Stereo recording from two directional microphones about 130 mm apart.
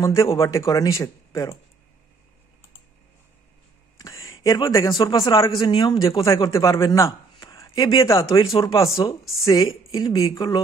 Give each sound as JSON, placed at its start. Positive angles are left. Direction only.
{"t": 0.0, "sound": "speech", "side_deg": 20}
{"t": 4.0, "sound": "a sound", "side_deg": 25}
{"t": 4.9, "sound": "a man's voice", "side_deg": 40}